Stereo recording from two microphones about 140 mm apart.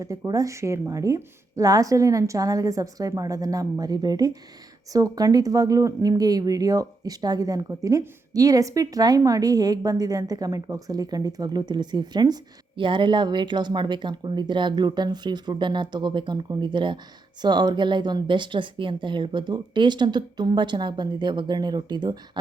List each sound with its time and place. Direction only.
0.3 s a woman's voice: 25° right (ahead or behind)